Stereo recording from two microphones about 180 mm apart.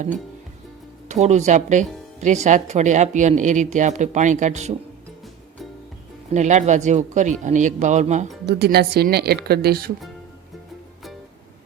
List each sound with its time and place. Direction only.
1.0 s speech: 40° right (ahead or behind)
6.3 s speech: 40° right (ahead or behind)
8.4 s speech: 60° right (ahead or behind)